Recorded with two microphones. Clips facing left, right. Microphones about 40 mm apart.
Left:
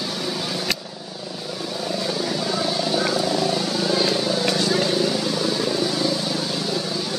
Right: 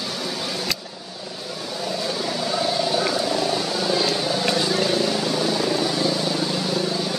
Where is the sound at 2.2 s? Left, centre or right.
Centre.